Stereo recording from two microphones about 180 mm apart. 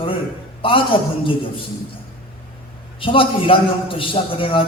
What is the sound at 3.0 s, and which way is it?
A man's voice, 30° left (ahead or behind).